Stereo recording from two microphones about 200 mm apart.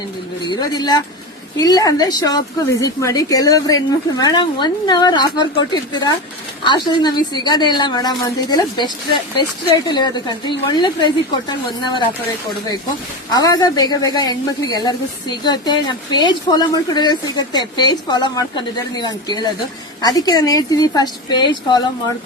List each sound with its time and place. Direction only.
0.4 s a woman's voice: 20° left (ahead or behind)
13.3 s a woman's voice: 20° left (ahead or behind)